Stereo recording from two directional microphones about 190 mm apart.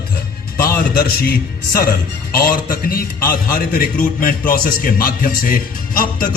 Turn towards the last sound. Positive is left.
turn(degrees=45)  # may be behind; listen again after turning